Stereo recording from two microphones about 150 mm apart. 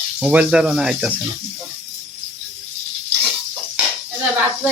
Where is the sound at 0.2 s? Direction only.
10° right (ahead or behind).